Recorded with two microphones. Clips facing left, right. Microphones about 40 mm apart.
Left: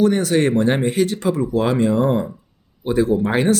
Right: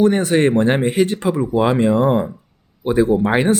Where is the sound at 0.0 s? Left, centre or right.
Right.